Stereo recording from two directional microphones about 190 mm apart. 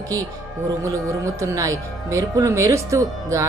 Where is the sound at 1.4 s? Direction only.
15° right (ahead or behind).